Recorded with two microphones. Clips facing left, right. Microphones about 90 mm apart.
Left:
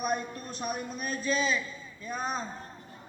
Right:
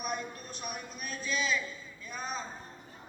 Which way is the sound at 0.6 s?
40° left (ahead or behind).